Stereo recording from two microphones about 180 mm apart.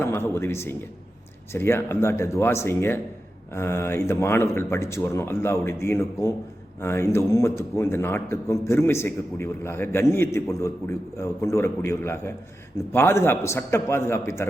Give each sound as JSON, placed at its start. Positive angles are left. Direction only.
{"t": 0.0, "sound": "a man's voice", "side_deg": 15}